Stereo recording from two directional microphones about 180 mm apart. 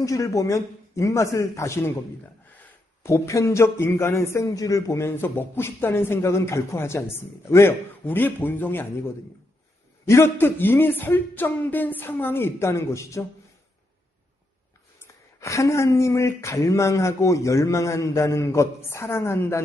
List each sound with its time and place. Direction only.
0.0 s speech: 15° left (ahead or behind)
15.4 s speech: 15° left (ahead or behind)